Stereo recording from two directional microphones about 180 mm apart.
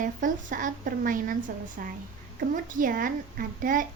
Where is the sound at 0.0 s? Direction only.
45° right (ahead or behind).